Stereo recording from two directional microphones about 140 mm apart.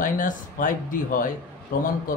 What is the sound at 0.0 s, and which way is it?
A man's voice, 70° left (ahead or behind).